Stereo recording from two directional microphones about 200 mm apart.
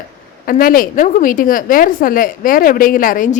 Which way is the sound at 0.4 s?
45° left (ahead or behind).